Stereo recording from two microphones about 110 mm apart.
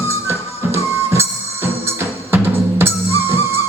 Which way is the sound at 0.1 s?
25° right (ahead or behind).